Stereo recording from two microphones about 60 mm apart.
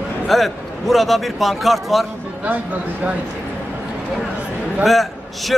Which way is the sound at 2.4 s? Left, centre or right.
Right.